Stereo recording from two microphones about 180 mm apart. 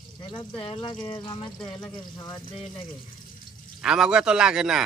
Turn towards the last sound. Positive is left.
turn(degrees=-5)  # may be behind; listen again after turning